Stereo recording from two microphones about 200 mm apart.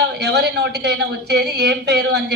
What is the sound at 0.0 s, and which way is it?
A woman's voice, 55° right (ahead or behind).